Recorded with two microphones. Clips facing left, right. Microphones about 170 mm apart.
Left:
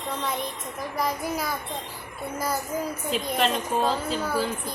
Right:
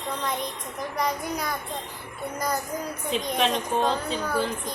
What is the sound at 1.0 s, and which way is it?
A woman's voice, 5° left (ahead or behind).